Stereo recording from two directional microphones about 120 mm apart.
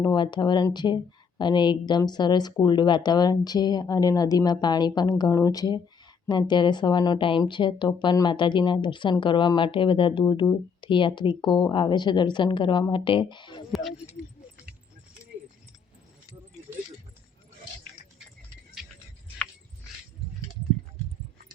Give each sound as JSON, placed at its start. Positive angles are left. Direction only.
{"t": 0.0, "sound": "speech", "side_deg": 35}